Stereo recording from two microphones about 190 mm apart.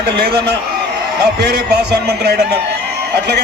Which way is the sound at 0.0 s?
60° right (ahead or behind).